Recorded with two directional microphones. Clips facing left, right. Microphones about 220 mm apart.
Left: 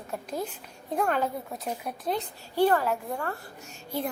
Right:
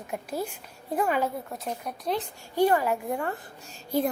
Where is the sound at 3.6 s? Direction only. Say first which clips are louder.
Right 6 dB; 35° right (ahead or behind).